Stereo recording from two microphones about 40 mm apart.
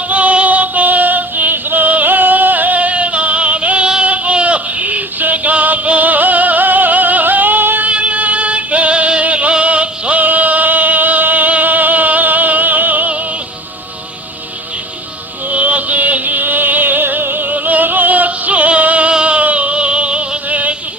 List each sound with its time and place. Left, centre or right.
0.1 s music: right
4.0 s a sound: right
7.9 s music: right
15.4 s music: right
20.5 s music: right